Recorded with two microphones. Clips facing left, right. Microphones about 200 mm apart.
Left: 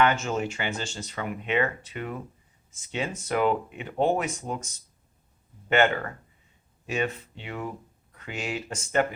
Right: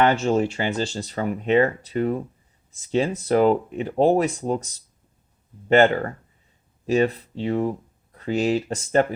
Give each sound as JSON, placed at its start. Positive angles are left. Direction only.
{"t": 0.0, "sound": "speech", "side_deg": -35}